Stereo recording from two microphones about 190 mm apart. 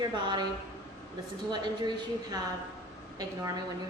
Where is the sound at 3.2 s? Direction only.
20° right (ahead or behind).